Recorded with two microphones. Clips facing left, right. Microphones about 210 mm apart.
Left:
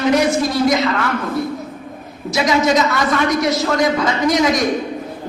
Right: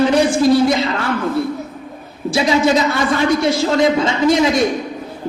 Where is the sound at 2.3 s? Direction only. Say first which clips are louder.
Right 1 dB; 30° right (ahead or behind).